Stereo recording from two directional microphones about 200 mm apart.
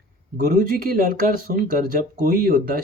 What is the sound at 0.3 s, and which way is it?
Speech, 40° right (ahead or behind).